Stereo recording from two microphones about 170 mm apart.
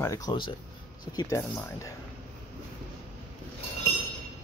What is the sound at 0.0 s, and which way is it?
Speech, 20° left (ahead or behind).